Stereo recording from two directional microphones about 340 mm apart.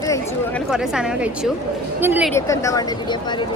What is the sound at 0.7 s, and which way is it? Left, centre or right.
Speech, centre.